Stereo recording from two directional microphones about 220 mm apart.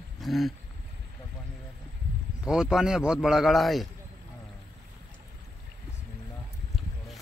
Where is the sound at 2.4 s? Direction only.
5° right (ahead or behind).